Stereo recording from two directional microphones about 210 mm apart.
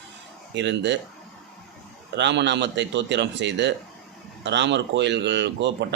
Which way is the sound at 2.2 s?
55° right (ahead or behind).